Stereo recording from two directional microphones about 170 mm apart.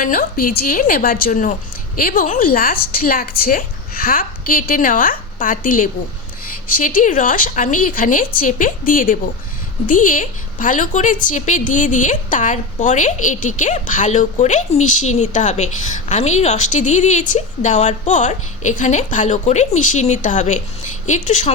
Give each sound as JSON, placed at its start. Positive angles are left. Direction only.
{"t": 0.0, "sound": "a woman's voice", "side_deg": 55}